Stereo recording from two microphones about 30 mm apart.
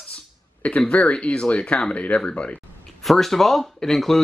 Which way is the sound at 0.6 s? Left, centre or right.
Left.